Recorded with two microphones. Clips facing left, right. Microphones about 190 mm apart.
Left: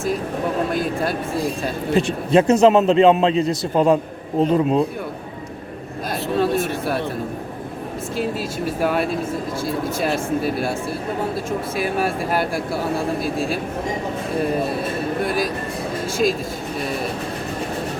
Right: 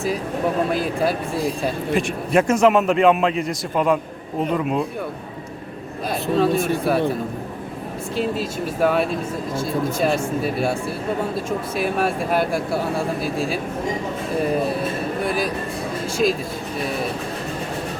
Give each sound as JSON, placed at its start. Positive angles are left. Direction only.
{"t": 0.7, "sound": "speech", "side_deg": -5}
{"t": 1.9, "sound": "a man's voice", "side_deg": 25}
{"t": 6.4, "sound": "speech", "side_deg": 0}
{"t": 8.1, "sound": "speech", "side_deg": 5}
{"t": 11.8, "sound": "speech", "side_deg": 0}